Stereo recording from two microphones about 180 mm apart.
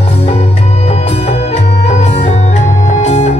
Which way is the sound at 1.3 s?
35° left (ahead or behind).